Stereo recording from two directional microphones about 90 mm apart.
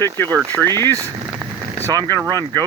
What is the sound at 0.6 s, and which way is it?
Speech, 50° right (ahead or behind).